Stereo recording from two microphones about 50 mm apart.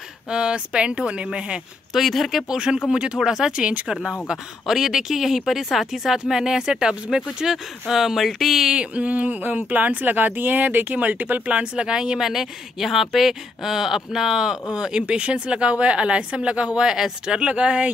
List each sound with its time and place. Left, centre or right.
0.3 s speech: right
2.0 s speech: centre
2.5 s speech: centre
4.3 s speech: centre
8.7 s speech: right
11.7 s speech: centre